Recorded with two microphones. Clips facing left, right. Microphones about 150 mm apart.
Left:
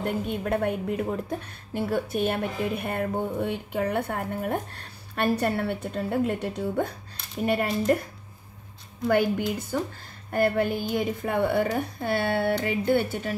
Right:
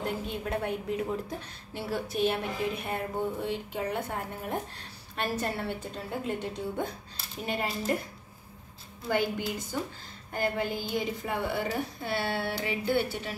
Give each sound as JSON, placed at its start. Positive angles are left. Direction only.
{"t": 0.0, "sound": "a woman's voice", "side_deg": 55}
{"t": 7.9, "sound": "a woman's voice", "side_deg": 55}